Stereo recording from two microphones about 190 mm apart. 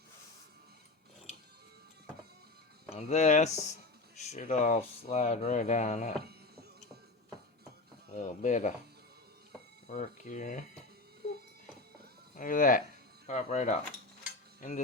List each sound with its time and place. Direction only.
2.9 s speech: 35° left (ahead or behind)
8.1 s speech: 40° left (ahead or behind)
9.9 s speech: 40° left (ahead or behind)
12.3 s speech: 45° left (ahead or behind)